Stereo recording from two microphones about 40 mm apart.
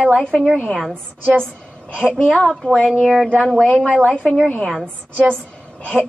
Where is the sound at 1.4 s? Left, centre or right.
Centre.